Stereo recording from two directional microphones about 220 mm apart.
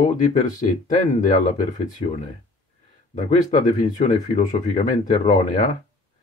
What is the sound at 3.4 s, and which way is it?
Speech, 35° left (ahead or behind).